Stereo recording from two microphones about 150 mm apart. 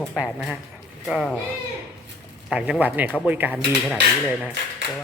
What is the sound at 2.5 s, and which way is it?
Speech, 10° right (ahead or behind).